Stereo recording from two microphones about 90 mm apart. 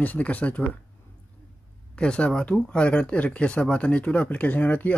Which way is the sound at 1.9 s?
10° left (ahead or behind).